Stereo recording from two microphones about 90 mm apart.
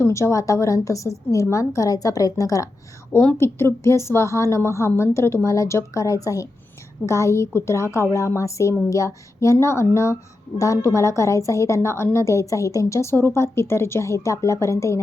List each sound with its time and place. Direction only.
0.0 s a woman's voice: 35° left (ahead or behind)
3.1 s a woman's voice: 25° left (ahead or behind)